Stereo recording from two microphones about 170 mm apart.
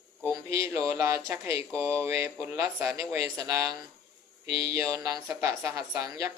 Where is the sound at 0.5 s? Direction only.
15° right (ahead or behind).